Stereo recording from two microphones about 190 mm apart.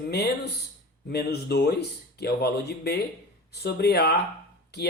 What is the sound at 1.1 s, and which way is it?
Speech, 60° left (ahead or behind).